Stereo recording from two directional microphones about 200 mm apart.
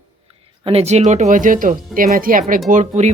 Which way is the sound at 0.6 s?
30° right (ahead or behind).